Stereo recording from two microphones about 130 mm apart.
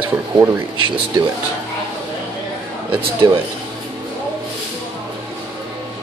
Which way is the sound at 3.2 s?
30° right (ahead or behind).